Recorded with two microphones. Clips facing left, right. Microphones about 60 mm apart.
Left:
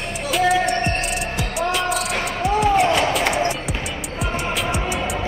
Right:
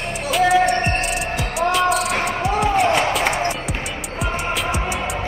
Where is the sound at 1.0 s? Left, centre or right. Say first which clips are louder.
Right 1 dB; centre.